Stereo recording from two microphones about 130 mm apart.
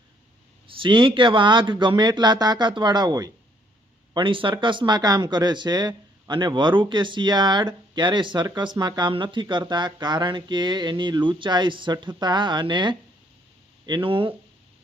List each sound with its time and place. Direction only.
0.7 s speech: 40° right (ahead or behind)
4.1 s speech: 40° right (ahead or behind)